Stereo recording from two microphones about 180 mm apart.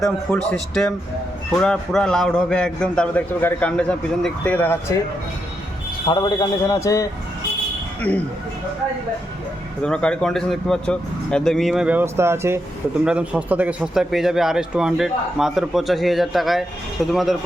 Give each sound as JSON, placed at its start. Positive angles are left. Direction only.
{"t": 0.0, "sound": "speech", "side_deg": 0}
{"t": 6.1, "sound": "a man's voice", "side_deg": 25}
{"t": 9.8, "sound": "speech", "side_deg": 5}